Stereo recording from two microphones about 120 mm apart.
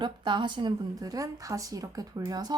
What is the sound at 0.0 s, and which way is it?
A woman's voice, 40° right (ahead or behind).